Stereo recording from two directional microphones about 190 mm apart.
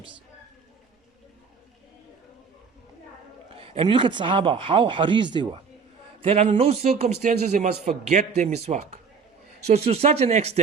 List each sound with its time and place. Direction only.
3.5 s a man's voice: 30° right (ahead or behind)